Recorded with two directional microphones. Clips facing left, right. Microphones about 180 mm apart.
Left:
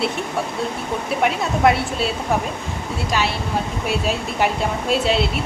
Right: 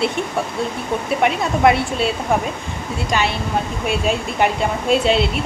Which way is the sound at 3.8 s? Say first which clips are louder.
Right 2 dB; centre (ahead or behind).